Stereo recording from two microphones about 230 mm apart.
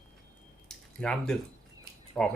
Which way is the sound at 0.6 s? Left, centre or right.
Centre.